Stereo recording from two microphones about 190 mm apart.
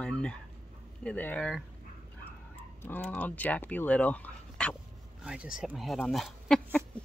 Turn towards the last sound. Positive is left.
turn(degrees=0)  # may be behind; listen again after turning